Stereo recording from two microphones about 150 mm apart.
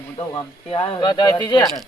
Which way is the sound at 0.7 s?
40° left (ahead or behind).